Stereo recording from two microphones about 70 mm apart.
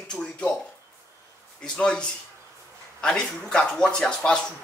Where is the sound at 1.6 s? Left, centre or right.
Centre.